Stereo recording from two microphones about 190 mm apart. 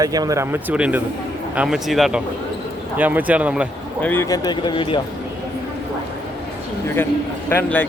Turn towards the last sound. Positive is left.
turn(degrees=10)  # may be behind; listen again after turning